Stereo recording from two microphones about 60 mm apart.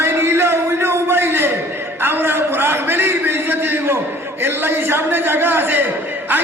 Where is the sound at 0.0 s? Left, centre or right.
Right.